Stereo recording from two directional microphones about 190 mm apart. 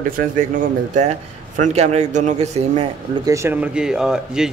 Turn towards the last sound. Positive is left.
turn(degrees=-5)  # may be behind; listen again after turning